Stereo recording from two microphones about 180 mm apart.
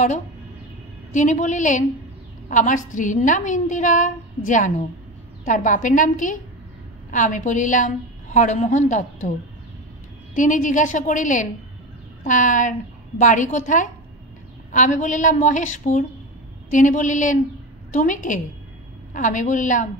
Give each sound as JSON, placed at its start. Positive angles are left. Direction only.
{"t": 1.1, "sound": "a woman's voice", "side_deg": 45}
{"t": 10.3, "sound": "a woman's voice", "side_deg": 45}